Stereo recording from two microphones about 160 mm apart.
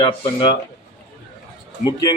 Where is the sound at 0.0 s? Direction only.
30° left (ahead or behind).